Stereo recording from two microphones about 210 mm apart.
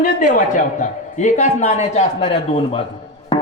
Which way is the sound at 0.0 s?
40° left (ahead or behind).